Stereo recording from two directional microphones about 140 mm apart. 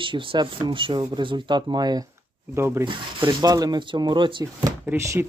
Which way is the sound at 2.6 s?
20° right (ahead or behind).